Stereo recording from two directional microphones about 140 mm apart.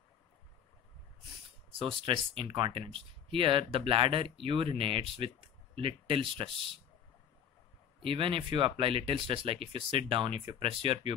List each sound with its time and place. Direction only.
1.7 s speech: 40° right (ahead or behind)
8.0 s speech: 40° right (ahead or behind)